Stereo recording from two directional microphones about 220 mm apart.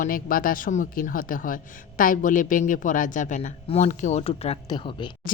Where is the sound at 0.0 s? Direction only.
40° left (ahead or behind); by 5.1 s 20° left (ahead or behind).